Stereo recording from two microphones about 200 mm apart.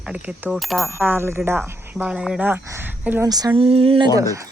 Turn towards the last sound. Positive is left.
turn(degrees=-15)  # may be behind; listen again after turning